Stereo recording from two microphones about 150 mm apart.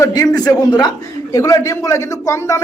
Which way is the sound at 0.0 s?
25° left (ahead or behind).